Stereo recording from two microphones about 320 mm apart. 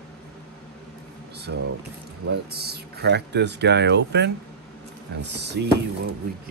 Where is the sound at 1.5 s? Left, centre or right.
Right.